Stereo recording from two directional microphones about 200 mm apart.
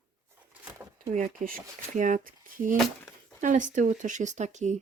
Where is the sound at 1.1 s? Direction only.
40° right (ahead or behind).